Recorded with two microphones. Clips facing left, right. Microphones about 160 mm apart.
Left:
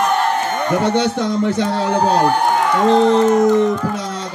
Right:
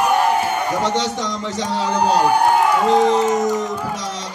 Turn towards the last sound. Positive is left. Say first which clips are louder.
# left 7 dB
turn(degrees=-10)  # may be behind; listen again after turning